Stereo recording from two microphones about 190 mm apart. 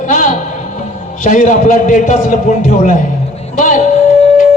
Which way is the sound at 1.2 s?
40° left (ahead or behind).